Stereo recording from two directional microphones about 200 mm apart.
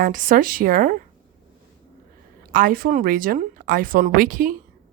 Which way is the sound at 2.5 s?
40° right (ahead or behind).